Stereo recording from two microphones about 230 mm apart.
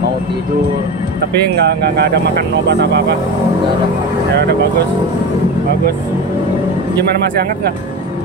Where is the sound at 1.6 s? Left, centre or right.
Right.